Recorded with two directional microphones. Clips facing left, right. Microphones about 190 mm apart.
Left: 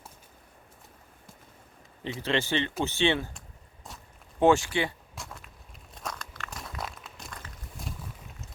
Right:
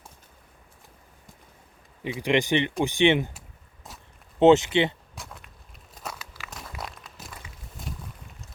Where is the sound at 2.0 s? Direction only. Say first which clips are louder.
Right 5 dB; 15° right (ahead or behind).